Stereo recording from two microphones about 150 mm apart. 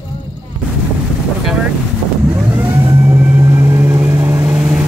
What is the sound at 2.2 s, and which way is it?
Vehicle, 15° right (ahead or behind).